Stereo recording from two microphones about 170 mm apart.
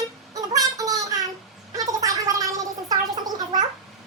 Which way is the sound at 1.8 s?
20° right (ahead or behind).